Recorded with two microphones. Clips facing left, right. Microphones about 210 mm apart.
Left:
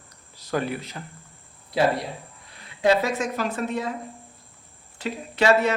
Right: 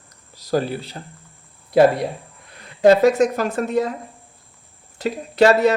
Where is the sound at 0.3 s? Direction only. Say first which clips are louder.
Right 5 dB; 35° right (ahead or behind).